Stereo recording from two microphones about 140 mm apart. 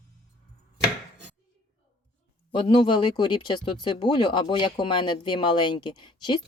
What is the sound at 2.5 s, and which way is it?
Speech, 35° left (ahead or behind).